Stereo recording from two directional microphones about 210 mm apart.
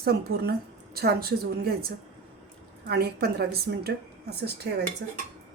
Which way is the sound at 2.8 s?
50° right (ahead or behind).